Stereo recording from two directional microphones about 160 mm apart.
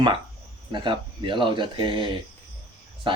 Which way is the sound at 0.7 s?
30° right (ahead or behind).